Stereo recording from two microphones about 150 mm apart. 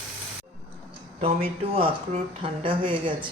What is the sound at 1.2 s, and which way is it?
A woman's voice, 40° right (ahead or behind).